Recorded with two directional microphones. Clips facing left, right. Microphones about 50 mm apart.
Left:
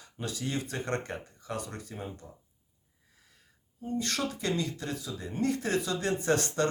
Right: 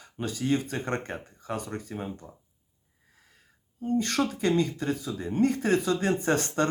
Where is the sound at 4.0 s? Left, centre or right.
Right.